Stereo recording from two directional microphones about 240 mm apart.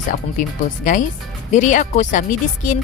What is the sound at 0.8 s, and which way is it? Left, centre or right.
A woman's voice, left.